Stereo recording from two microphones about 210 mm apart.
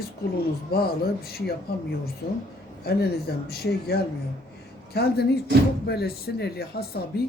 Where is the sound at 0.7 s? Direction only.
45° left (ahead or behind).